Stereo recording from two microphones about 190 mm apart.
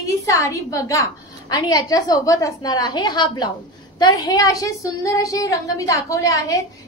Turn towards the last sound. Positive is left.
turn(degrees=15)  # may be behind; listen again after turning